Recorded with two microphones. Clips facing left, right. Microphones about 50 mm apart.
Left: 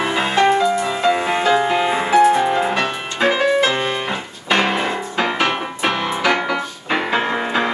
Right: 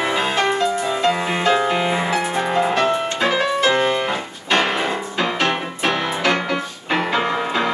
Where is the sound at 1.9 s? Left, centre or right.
Centre.